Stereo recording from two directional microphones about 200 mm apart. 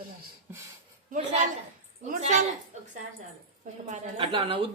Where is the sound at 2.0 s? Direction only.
35° right (ahead or behind).